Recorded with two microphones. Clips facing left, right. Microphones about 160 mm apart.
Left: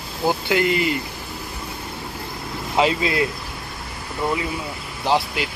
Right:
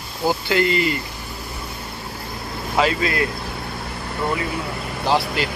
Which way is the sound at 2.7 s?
20° left (ahead or behind).